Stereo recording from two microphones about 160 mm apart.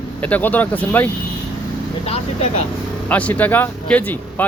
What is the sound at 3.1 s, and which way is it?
A man's voice, 10° left (ahead or behind).